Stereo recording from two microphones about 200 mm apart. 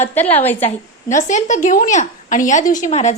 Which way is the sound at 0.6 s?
40° left (ahead or behind).